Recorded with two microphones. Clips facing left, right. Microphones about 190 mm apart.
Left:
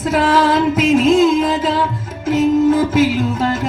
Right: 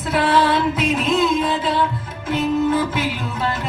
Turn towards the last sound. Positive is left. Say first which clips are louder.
# left 7 dB
turn(degrees=45)  # may be behind; listen again after turning